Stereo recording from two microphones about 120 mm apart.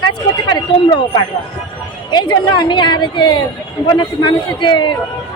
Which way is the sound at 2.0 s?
40° left (ahead or behind).